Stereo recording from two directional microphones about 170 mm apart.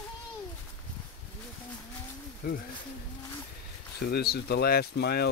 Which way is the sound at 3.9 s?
70° left (ahead or behind).